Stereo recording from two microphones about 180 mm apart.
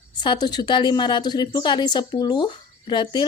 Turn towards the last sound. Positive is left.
turn(degrees=25)  # may be behind; listen again after turning